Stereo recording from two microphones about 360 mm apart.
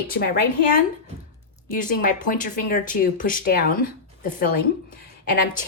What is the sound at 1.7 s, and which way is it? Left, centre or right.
Speech, left.